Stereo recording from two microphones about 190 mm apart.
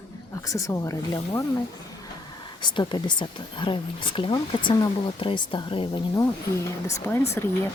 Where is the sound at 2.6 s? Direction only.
25° left (ahead or behind).